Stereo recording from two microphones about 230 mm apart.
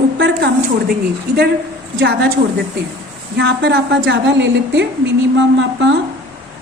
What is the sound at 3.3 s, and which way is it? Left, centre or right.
A woman's voice, right.